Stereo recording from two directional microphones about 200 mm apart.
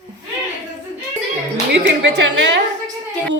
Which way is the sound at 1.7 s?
60° right (ahead or behind).